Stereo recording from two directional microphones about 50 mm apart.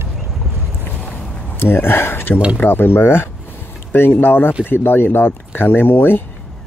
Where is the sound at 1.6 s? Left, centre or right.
Left.